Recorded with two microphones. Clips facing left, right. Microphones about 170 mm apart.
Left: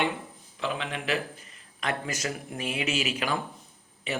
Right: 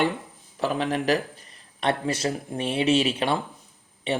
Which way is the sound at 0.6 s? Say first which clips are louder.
Right 7 dB; 40° right (ahead or behind).